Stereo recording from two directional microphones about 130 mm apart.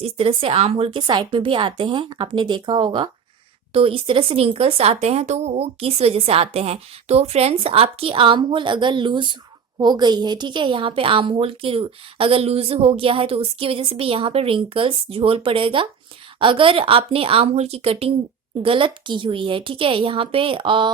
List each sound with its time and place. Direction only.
0.0 s a woman's voice: 45° right (ahead or behind)